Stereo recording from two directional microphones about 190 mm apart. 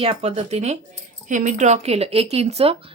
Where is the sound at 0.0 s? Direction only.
30° right (ahead or behind).